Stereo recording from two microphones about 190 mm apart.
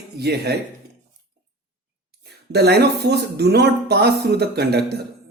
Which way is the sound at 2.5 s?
60° right (ahead or behind).